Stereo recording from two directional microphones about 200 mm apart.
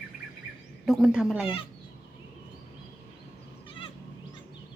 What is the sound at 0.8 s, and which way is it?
Speech, centre (ahead or behind).